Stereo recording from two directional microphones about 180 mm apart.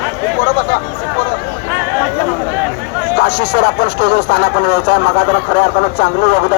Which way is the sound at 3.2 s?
60° left (ahead or behind).